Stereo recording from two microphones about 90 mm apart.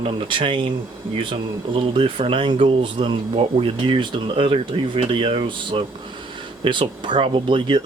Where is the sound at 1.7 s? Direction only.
75° right (ahead or behind).